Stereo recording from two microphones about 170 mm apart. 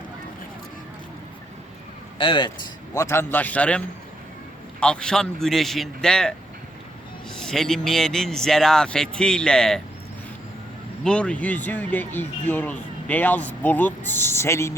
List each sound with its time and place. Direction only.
2.1 s a man's voice: 30° left (ahead or behind)
2.9 s speech: 15° left (ahead or behind)
11.0 s speech: 5° left (ahead or behind)